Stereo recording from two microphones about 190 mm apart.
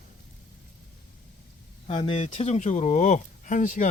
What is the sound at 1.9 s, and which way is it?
Speech, 25° left (ahead or behind).